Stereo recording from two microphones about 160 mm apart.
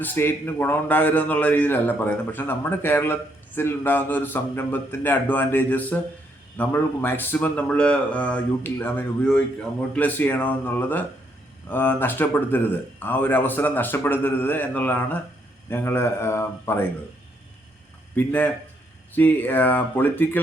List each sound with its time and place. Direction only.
0.0 s a man's voice: 15° left (ahead or behind)
18.1 s a man's voice: 10° left (ahead or behind)